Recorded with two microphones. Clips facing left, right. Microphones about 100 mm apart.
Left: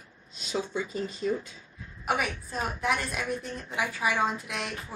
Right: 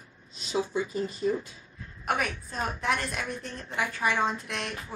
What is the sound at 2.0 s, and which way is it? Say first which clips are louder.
A woman's voice: even; 5° left (ahead or behind).